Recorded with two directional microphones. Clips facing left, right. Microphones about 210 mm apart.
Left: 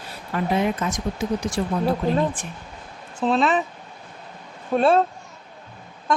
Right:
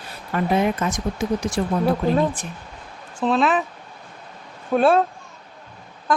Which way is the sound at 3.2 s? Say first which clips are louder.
Right 1 dB; centre (ahead or behind).